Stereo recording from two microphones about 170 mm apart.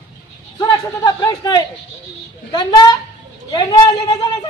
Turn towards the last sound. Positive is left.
turn(degrees=25)  # may be behind; listen again after turning